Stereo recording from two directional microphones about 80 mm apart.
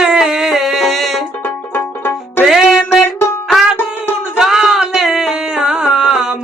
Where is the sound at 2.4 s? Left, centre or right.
Centre.